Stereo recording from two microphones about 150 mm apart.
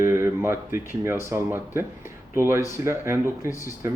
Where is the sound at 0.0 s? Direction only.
15° right (ahead or behind).